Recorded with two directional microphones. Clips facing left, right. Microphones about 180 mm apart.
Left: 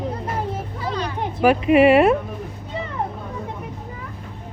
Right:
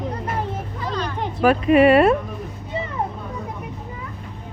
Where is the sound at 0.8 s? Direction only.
10° left (ahead or behind).